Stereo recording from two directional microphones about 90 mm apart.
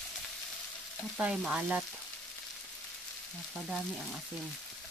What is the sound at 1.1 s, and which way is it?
Frying, 5° right (ahead or behind).